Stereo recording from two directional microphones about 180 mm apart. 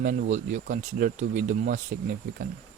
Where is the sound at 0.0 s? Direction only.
50° right (ahead or behind).